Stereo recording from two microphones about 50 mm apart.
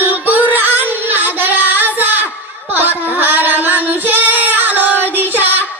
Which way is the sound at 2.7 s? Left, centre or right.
Right.